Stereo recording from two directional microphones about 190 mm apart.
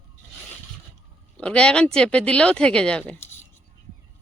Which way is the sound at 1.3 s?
5° left (ahead or behind).